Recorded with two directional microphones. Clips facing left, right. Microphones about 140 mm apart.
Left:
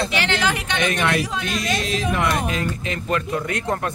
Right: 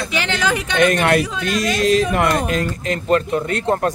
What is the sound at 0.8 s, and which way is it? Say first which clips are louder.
Speech: right 8 dB; 45° right (ahead or behind).